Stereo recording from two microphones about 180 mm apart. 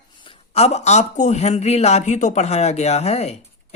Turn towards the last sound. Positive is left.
turn(degrees=35)  # may be behind; listen again after turning